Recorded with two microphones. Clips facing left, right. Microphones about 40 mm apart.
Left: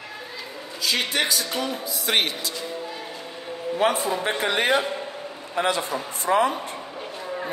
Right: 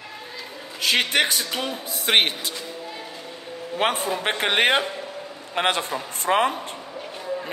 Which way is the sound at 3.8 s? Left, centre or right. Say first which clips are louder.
Left 1 dB; right.